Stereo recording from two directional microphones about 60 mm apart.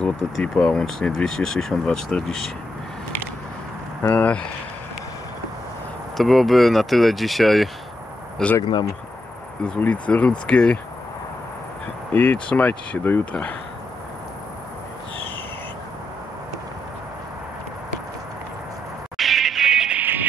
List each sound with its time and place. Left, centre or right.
0.0 s speech: centre
4.0 s speech: left
6.1 s speech: centre
9.8 s speech: left
12.1 s speech: left
19.1 s music: centre
20.0 s music: right